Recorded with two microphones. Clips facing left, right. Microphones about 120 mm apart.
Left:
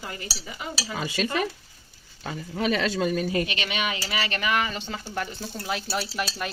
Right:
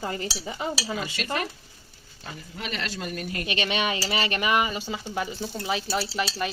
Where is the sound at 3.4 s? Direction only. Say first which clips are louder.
Right 3 dB; 20° right (ahead or behind).